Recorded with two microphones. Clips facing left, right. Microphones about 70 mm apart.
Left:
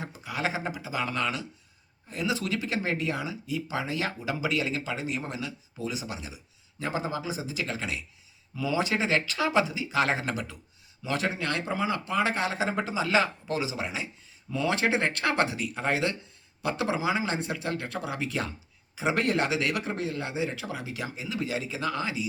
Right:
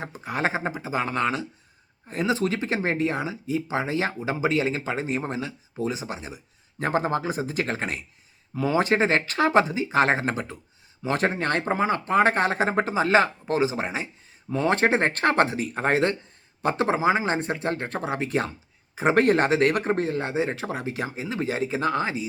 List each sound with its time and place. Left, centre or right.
0.0 s speech: right